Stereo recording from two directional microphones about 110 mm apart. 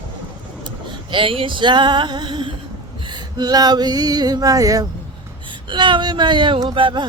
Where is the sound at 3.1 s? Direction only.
40° right (ahead or behind).